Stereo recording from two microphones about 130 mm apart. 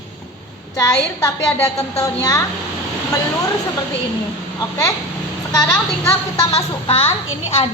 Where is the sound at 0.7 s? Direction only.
25° left (ahead or behind).